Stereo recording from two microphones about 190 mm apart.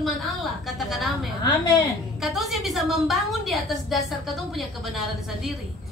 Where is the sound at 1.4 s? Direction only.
20° left (ahead or behind).